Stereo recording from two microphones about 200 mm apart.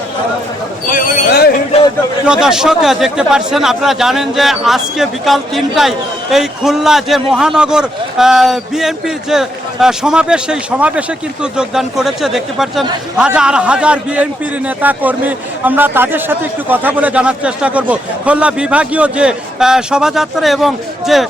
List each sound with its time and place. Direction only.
0.9 s speech: 45° left (ahead or behind)
2.2 s a man's voice: 5° right (ahead or behind)